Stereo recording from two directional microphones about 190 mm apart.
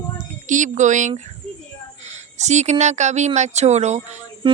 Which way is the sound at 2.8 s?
40° right (ahead or behind).